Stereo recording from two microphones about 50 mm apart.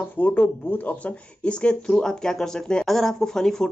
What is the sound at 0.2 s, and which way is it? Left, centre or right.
Speech, left.